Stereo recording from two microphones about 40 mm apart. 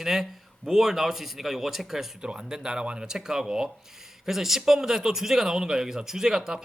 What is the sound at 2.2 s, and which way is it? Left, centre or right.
A man's voice, centre.